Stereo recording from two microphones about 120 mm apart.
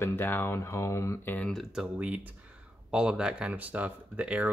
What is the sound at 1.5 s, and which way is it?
Speech, centre (ahead or behind).